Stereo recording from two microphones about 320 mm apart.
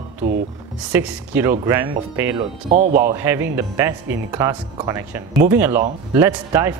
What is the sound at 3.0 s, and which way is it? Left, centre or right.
Speech, centre.